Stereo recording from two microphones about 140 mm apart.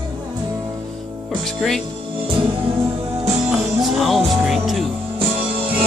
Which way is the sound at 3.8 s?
Centre (ahead or behind).